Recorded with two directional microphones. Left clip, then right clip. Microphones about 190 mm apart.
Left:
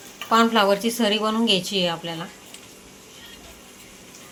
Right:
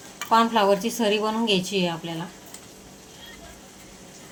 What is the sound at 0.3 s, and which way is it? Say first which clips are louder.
A woman's voice: left 1 dB; 5° left (ahead or behind).